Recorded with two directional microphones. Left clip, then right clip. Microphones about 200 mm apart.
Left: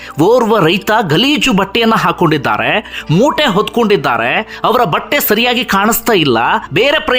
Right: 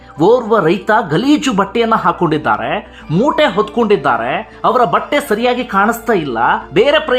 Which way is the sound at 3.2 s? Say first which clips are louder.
Right 1 dB; 30° left (ahead or behind).